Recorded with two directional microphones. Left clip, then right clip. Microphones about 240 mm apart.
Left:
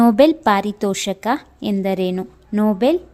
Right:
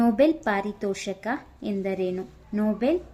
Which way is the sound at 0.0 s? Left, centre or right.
Left.